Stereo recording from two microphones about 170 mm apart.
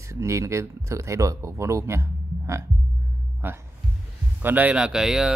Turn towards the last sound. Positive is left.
turn(degrees=-5)  # may be behind; listen again after turning